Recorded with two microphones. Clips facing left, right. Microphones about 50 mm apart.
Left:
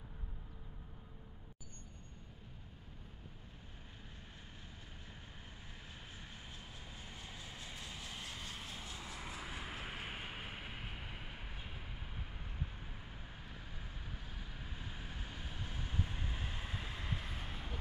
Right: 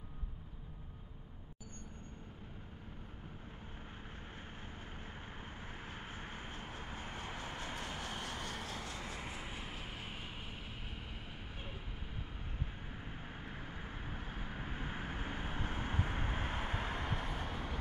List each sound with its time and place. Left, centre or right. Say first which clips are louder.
5.9 s vehicle: right 6 dB; right
9.5 s vehicle: even; centre
9.8 s vehicle: left 2 dB; centre
13.4 s vehicle: right 5 dB; right